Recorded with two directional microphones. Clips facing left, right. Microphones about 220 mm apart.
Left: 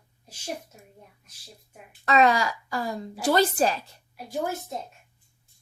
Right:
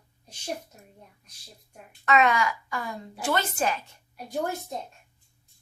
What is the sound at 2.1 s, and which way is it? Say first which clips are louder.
A woman's voice: left 2 dB; 35° left (ahead or behind).